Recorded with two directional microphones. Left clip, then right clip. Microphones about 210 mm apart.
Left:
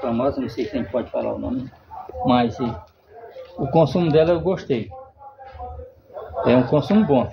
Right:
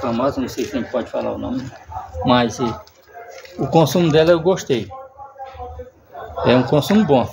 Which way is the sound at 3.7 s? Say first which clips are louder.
Right 2 dB; 50° right (ahead or behind).